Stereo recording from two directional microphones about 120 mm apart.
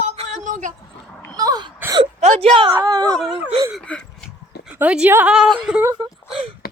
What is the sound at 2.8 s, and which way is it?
Speech, 35° right (ahead or behind).